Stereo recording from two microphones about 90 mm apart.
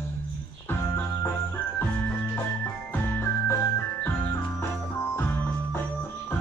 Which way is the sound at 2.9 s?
25° left (ahead or behind).